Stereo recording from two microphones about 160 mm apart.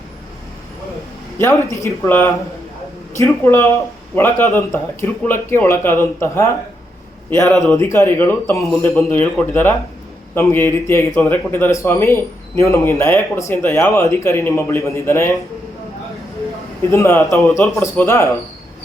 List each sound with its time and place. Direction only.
1.4 s a man's voice: 15° left (ahead or behind)
7.5 s a man's voice: centre (ahead or behind)
7.8 s a man's voice: 20° left (ahead or behind)
16.9 s a man's voice: 15° left (ahead or behind)